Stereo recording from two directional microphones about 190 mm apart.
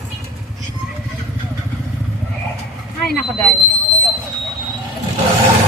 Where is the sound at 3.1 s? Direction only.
Centre (ahead or behind).